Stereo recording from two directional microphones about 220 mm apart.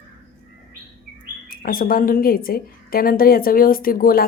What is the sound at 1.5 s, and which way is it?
A woman's voice, 40° left (ahead or behind).